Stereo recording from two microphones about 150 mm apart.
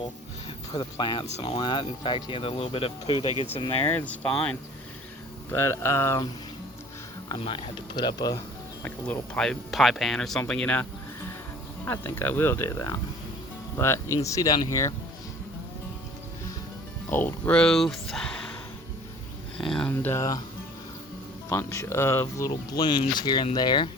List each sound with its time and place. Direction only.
0.7 s speech: 30° left (ahead or behind)
1.2 s speech: 40° left (ahead or behind)
3.8 s speech: 10° left (ahead or behind)
7.3 s speech: 35° left (ahead or behind)
8.8 s speech: 10° left (ahead or behind)
11.9 s speech: 15° left (ahead or behind)
17.1 s speech: 10° left (ahead or behind)
19.5 s speech: 5° left (ahead or behind); by 20.4 s 20° left (ahead or behind)
21.5 s speech: 20° left (ahead or behind)